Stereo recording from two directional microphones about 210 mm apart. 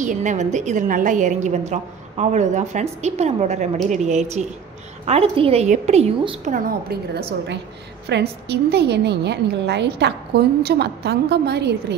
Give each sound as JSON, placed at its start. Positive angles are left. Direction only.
{"t": 0.0, "sound": "a woman's voice", "side_deg": -35}
{"t": 6.5, "sound": "a woman's voice", "side_deg": -45}